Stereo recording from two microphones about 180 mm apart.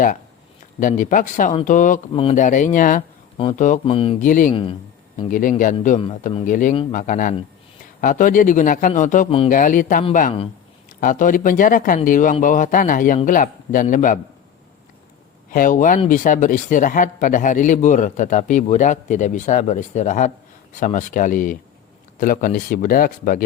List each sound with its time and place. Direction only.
0.8 s speech: 45° left (ahead or behind)
3.8 s speech: 30° left (ahead or behind)
4.2 s speech: 45° left (ahead or behind)
4.5 s speech: 30° left (ahead or behind)
5.3 s speech: 45° left (ahead or behind)
15.5 s speech: 45° left (ahead or behind)